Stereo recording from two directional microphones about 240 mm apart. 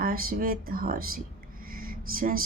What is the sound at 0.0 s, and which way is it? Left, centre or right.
Speech, right.